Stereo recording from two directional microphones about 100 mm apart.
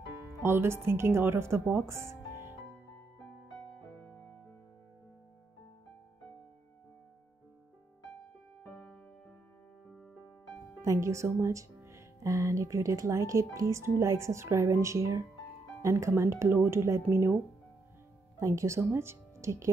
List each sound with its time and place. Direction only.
0.4 s speech: 25° right (ahead or behind)
3.5 s music: 5° left (ahead or behind)
10.8 s speech: 30° right (ahead or behind)
18.4 s speech: 30° right (ahead or behind)